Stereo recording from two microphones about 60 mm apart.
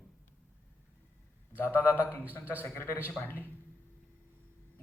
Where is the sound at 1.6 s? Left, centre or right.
Left.